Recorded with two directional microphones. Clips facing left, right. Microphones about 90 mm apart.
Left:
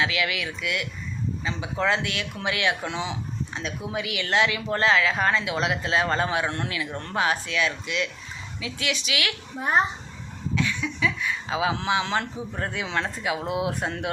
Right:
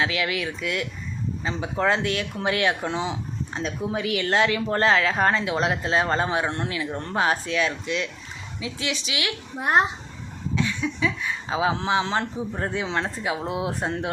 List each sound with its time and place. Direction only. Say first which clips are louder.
0.0 s speech: right 1 dB; 35° right (ahead or behind)
9.6 s a child's voice: right 2 dB; 5° right (ahead or behind)
10.5 s speech: right 1 dB; 30° right (ahead or behind)